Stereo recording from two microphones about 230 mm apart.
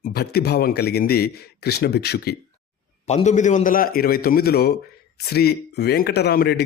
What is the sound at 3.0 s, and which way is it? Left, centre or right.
A man's voice, left.